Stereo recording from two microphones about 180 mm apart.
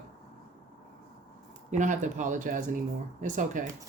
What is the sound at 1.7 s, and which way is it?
Speech, 45° right (ahead or behind).